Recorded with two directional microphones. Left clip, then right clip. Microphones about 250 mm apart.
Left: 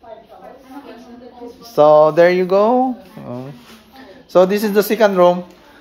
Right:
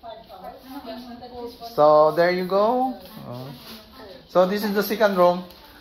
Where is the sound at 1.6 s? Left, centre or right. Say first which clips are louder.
Left 6 dB; left.